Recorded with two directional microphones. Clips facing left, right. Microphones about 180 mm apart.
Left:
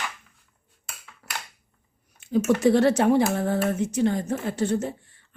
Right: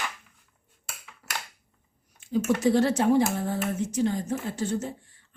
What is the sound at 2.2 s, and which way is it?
Speech, 65° left (ahead or behind).